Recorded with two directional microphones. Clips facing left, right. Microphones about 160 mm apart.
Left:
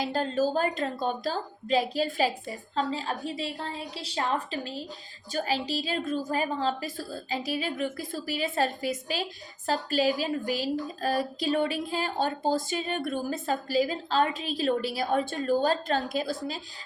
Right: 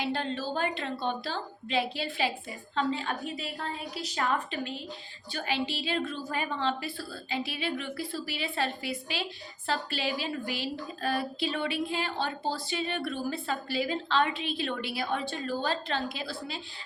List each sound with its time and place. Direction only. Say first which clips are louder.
0.0 s a woman's voice: left 5 dB; 40° left (ahead or behind)